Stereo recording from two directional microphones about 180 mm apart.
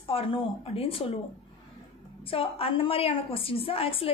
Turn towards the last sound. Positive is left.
turn(degrees=30)  # may be behind; listen again after turning